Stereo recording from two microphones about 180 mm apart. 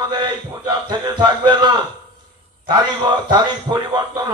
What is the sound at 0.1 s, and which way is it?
A man's voice, 25° right (ahead or behind).